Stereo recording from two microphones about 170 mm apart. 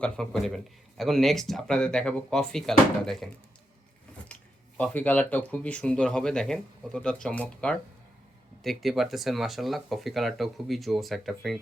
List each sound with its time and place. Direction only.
0.0 s speech: 5° left (ahead or behind)
4.3 s a sound: 5° left (ahead or behind)
4.8 s speech: 10° left (ahead or behind)